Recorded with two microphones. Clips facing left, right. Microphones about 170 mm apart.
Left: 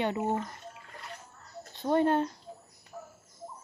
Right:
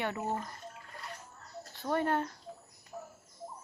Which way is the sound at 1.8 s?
25° left (ahead or behind).